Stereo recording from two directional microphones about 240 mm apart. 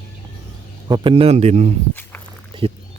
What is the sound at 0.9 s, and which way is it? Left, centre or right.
Speech, right.